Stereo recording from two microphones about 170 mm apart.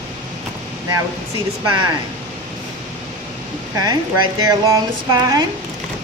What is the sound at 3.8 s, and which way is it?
Speech, 25° right (ahead or behind).